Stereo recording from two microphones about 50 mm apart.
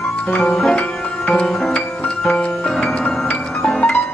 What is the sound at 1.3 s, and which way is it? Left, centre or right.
Music, centre.